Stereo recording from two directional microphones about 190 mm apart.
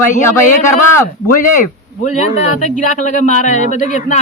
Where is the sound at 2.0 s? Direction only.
40° left (ahead or behind).